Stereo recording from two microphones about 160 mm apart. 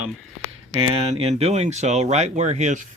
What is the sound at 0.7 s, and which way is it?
Speech, 40° right (ahead or behind).